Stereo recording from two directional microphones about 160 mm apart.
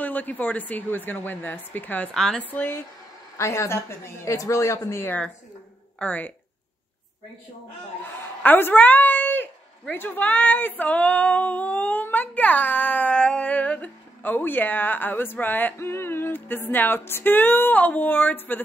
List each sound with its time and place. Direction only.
0.0 s a woman's voice: 10° left (ahead or behind)
8.2 s a woman's voice: 10° left (ahead or behind)